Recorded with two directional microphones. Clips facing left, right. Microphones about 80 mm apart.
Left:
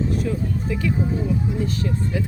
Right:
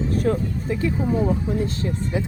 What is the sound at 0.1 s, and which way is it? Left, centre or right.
Music, right.